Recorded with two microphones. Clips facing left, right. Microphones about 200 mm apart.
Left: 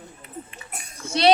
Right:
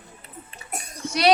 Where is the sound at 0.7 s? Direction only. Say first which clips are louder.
Right 5 dB; 40° right (ahead or behind).